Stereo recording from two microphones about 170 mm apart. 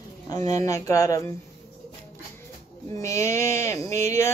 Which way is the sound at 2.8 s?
20° left (ahead or behind).